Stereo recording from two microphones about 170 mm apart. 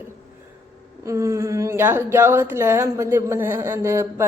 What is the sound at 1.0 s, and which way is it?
A woman's voice, 15° right (ahead or behind).